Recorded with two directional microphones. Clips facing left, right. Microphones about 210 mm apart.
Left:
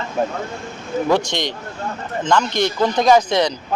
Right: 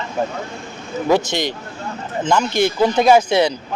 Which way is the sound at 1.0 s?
5° right (ahead or behind).